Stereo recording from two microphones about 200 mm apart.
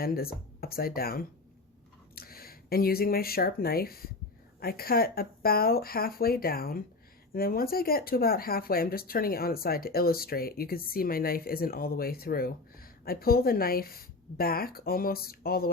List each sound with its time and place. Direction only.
0.0 s speech: 50° left (ahead or behind)